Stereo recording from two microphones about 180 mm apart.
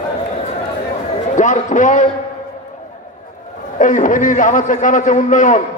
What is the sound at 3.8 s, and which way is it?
A man's voice, 45° left (ahead or behind).